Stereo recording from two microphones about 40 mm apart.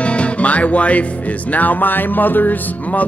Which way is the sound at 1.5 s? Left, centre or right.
Left.